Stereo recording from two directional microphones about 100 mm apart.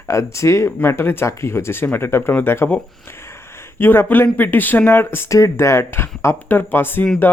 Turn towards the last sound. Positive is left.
turn(degrees=20)  # may be behind; listen again after turning